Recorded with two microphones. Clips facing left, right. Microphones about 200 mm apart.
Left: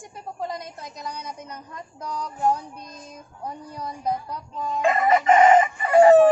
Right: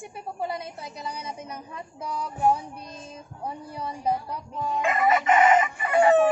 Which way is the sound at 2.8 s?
30° right (ahead or behind).